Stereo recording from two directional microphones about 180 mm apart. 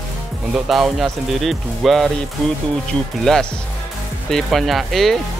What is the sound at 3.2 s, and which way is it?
Speech, 5° left (ahead or behind).